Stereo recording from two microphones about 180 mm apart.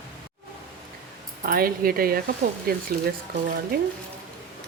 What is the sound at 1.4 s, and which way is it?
Speech, 55° right (ahead or behind).